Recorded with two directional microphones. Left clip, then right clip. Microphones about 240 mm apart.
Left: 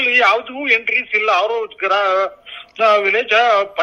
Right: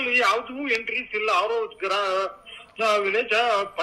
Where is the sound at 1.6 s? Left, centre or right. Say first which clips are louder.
Left 8 dB; left.